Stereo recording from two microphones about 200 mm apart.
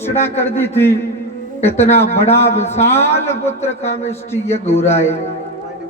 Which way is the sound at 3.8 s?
35° left (ahead or behind).